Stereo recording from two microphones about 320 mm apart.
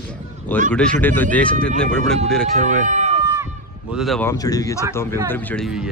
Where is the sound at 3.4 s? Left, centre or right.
Centre.